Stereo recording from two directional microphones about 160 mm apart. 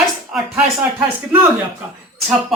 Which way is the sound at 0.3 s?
10° right (ahead or behind).